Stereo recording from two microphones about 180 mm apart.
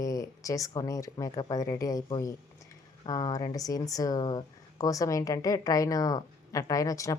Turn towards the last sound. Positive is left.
turn(degrees=20)  # may be behind; listen again after turning